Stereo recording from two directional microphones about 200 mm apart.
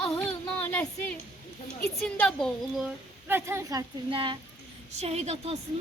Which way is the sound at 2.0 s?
5° left (ahead or behind).